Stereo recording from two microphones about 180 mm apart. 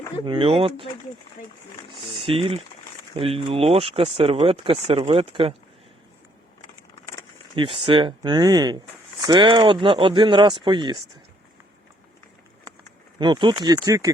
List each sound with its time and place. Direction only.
0.3 s speech: 30° right (ahead or behind)
2.2 s speech: 30° right (ahead or behind)
7.5 s speech: 30° right (ahead or behind)
13.1 s speech: 25° right (ahead or behind)